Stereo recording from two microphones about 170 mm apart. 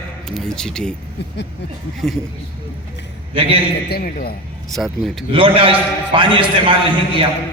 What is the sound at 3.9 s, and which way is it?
Speech, 60° left (ahead or behind).